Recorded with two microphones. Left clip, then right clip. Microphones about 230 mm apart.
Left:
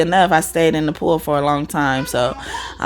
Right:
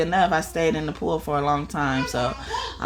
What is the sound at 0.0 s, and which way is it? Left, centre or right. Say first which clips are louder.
Speech: left 7 dB; left.